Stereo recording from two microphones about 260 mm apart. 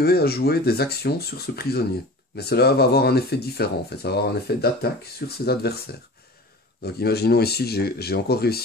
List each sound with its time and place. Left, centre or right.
0.0 s speech: left